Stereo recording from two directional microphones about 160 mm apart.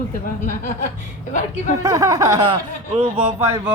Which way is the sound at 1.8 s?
20° right (ahead or behind).